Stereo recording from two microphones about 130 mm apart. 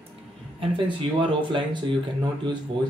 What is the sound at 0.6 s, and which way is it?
A woman's voice, 40° right (ahead or behind).